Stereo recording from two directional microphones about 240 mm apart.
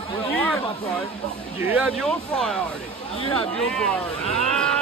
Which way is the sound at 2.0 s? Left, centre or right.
Centre.